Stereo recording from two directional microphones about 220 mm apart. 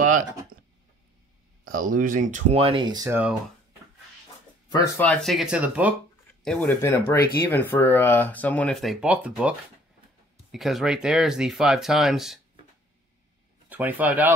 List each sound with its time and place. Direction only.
0.0 s a sound: 35° right (ahead or behind)
1.6 s speech: 40° right (ahead or behind); by 3.3 s 10° right (ahead or behind)
4.9 s speech: 5° left (ahead or behind)
6.4 s speech: 5° left (ahead or behind)
13.7 s speech: 5° right (ahead or behind)